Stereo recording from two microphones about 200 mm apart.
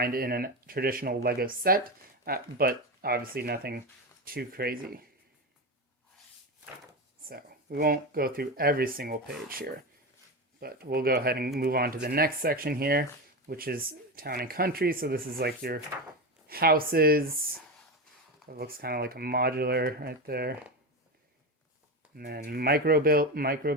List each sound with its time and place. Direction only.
0.0 s speech: 50° right (ahead or behind)
7.3 s speech: 50° right (ahead or behind)
22.1 s speech: 50° right (ahead or behind)